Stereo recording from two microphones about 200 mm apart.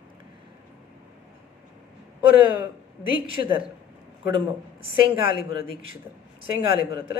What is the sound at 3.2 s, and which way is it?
Speech, 25° right (ahead or behind).